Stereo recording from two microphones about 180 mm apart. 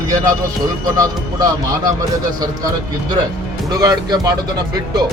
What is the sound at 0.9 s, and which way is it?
Speech, 20° right (ahead or behind).